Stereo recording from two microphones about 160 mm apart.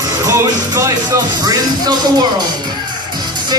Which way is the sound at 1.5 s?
25° right (ahead or behind).